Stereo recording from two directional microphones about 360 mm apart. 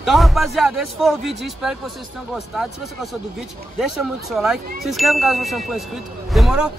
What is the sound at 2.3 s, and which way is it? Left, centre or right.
A man's voice, centre.